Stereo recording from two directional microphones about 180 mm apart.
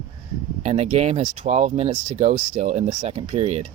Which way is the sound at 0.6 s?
35° right (ahead or behind).